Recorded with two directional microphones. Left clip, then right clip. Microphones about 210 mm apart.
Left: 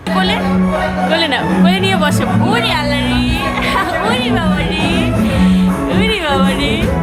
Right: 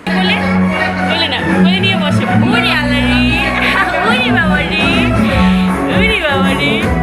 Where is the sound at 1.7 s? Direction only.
90° left.